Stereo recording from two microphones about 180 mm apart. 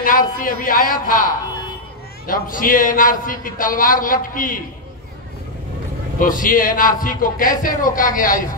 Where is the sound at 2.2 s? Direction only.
50° left (ahead or behind).